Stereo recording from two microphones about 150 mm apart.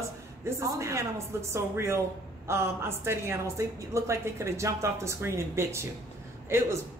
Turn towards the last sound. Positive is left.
turn(degrees=-15)  # may be behind; listen again after turning